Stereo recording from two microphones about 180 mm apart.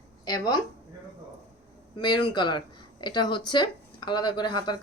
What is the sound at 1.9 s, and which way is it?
A woman's voice, 25° left (ahead or behind).